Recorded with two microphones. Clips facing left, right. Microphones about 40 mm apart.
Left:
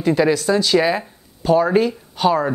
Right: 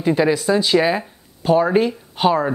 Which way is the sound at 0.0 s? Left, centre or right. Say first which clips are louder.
Even; centre.